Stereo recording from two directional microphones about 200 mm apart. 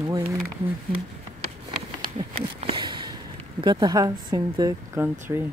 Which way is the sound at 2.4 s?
30° right (ahead or behind).